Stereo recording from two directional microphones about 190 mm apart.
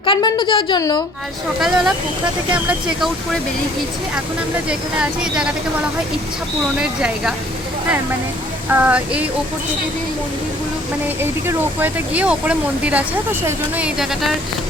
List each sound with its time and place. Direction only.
0.0 s a woman's voice: 25° left (ahead or behind)
1.6 s a woman's voice: centre (ahead or behind)
4.7 s a woman's voice: 5° right (ahead or behind)
6.7 s a woman's voice: 5° right (ahead or behind)
8.8 s speech: 5° right (ahead or behind)
11.2 s a woman's voice: 10° right (ahead or behind)